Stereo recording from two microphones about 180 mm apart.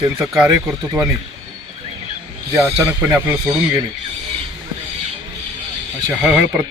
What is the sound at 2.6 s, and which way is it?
Speech, 15° right (ahead or behind).